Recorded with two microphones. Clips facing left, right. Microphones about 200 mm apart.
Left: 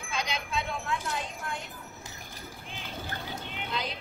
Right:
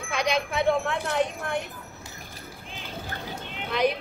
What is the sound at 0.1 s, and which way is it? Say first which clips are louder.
Speech: right 7 dB; 70° right (ahead or behind).